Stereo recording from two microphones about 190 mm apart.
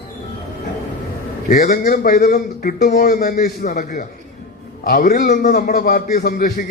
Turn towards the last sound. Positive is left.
turn(degrees=55)  # may be behind; listen again after turning